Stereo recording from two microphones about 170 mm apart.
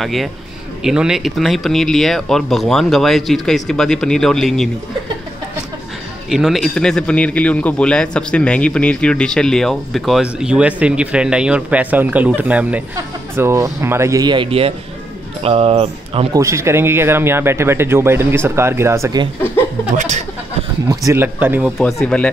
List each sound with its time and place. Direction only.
0.0 s a man's voice: centre (ahead or behind)
6.2 s a man's voice: centre (ahead or behind); by 16.3 s 35° right (ahead or behind)
16.3 s speech: 15° right (ahead or behind)
20.0 s speech: 45° right (ahead or behind)
20.9 s speech: 20° right (ahead or behind)
21.7 s a man's voice: 5° left (ahead or behind)